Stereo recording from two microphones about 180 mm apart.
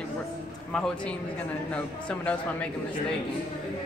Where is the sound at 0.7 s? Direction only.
5° left (ahead or behind).